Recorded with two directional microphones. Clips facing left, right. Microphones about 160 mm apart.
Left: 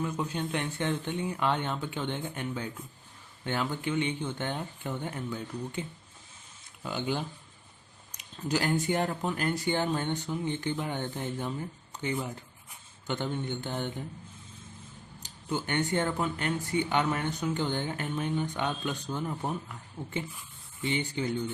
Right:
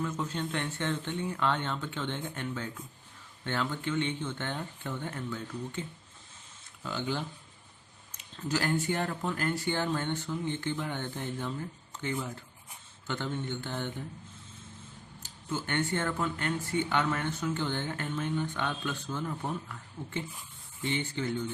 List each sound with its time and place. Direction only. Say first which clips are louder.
0.0 s speech: left 1 dB; 15° left (ahead or behind)
6.8 s speech: left 2 dB; 15° left (ahead or behind)
13.1 s speech: left 2 dB; 15° left (ahead or behind)
15.2 s speech: left 2 dB; 15° left (ahead or behind)